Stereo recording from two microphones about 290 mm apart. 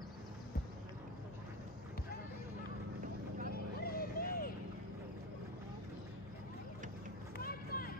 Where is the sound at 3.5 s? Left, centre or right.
Left.